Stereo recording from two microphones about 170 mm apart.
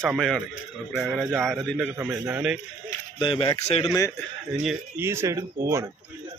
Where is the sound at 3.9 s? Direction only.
20° left (ahead or behind).